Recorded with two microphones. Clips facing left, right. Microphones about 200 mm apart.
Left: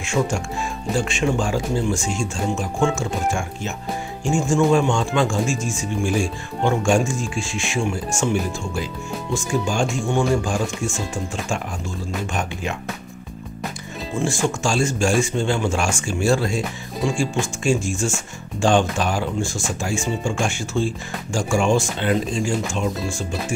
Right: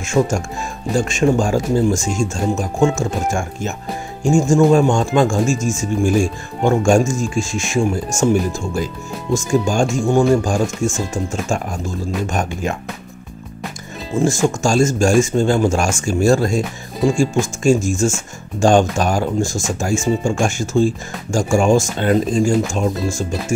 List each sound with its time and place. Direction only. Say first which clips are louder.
0.0 s speech: right 5 dB; 45° right (ahead or behind)
12.3 s speech: right 5 dB; 45° right (ahead or behind)
14.2 s speech: right 6 dB; 45° right (ahead or behind)